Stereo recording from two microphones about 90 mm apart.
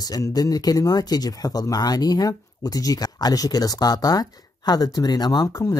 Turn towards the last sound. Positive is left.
turn(degrees=50)  # may be behind; listen again after turning